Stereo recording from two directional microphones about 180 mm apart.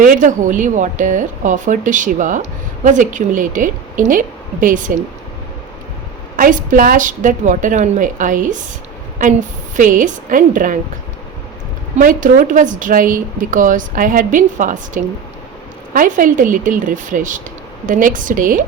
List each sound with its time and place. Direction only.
0.0 s speech: 45° right (ahead or behind)
6.3 s speech: 50° right (ahead or behind)
11.9 s speech: 50° right (ahead or behind)